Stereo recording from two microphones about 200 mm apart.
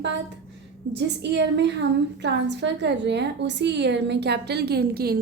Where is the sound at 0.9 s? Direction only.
60° right (ahead or behind).